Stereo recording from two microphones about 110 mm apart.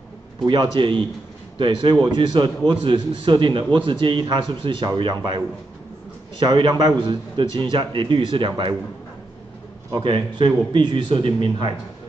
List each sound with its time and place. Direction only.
0.5 s a man's voice: 50° right (ahead or behind)
6.4 s a man's voice: 40° right (ahead or behind)
9.9 s a man's voice: 45° right (ahead or behind)